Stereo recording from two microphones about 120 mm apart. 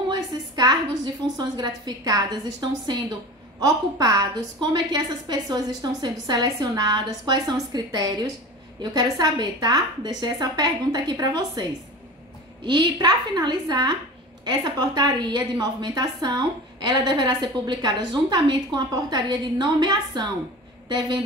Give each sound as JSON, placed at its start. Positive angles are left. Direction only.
{"t": 0.1, "sound": "a woman's voice", "side_deg": -35}
{"t": 12.6, "sound": "a woman's voice", "side_deg": -40}